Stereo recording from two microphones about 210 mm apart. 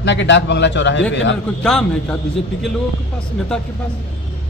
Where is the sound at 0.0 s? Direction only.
60° left (ahead or behind).